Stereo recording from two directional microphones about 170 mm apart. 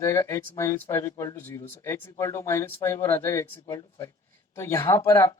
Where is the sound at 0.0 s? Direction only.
15° left (ahead or behind).